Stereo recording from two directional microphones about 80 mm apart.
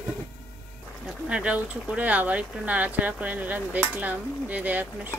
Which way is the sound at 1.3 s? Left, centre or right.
Centre.